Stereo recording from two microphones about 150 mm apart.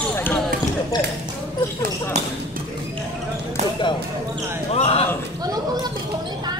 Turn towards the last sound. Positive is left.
turn(degrees=40)  # may be behind; listen again after turning